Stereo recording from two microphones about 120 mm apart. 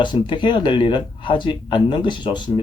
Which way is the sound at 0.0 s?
40° left (ahead or behind).